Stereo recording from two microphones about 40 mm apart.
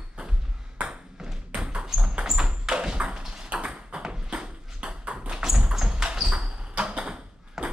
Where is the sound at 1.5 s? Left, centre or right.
Right.